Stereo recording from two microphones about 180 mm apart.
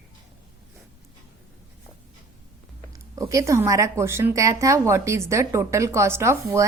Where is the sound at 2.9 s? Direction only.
20° right (ahead or behind).